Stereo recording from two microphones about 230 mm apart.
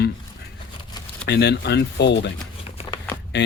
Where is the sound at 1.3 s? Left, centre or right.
Left.